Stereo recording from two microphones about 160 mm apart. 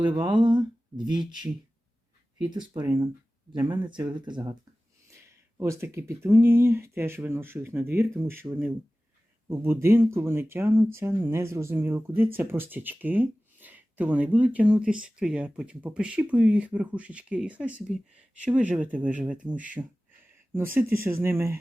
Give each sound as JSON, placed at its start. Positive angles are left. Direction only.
{"t": 0.0, "sound": "speech", "side_deg": -30}
{"t": 2.7, "sound": "speech", "side_deg": -15}
{"t": 3.5, "sound": "speech", "side_deg": -30}
{"t": 5.3, "sound": "speech", "side_deg": -15}
{"t": 19.4, "sound": "speech", "side_deg": -25}
{"t": 20.9, "sound": "speech", "side_deg": -15}